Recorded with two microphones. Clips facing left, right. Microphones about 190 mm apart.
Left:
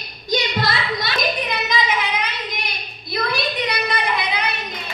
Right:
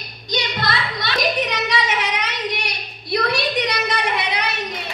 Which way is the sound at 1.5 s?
80° right.